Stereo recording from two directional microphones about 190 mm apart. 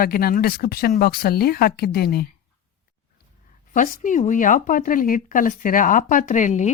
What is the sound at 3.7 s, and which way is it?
A woman's voice, 45° left (ahead or behind).